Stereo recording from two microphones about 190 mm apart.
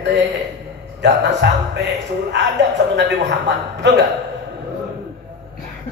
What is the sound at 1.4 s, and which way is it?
Speech, 65° right (ahead or behind).